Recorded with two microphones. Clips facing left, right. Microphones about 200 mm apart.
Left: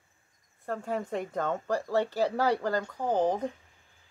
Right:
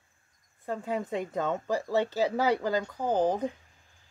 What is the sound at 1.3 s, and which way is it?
Speech, 5° right (ahead or behind).